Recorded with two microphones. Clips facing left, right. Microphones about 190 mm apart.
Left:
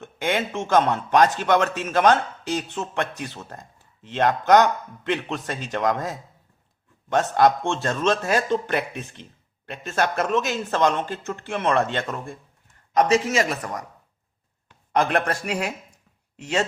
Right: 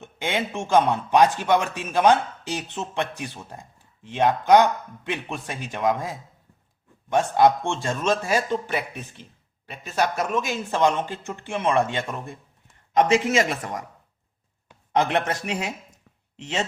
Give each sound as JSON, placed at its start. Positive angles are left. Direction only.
{"t": 0.0, "sound": "speech", "side_deg": -15}
{"t": 13.6, "sound": "a man's voice", "side_deg": -20}
{"t": 14.9, "sound": "a man's voice", "side_deg": -20}
{"t": 16.4, "sound": "a man's voice", "side_deg": -20}